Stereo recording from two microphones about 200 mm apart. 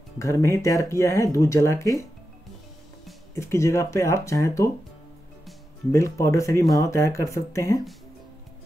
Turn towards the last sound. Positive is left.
turn(degrees=15)  # may be behind; listen again after turning